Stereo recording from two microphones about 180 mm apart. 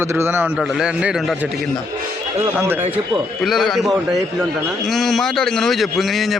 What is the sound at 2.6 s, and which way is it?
Speech, 10° right (ahead or behind).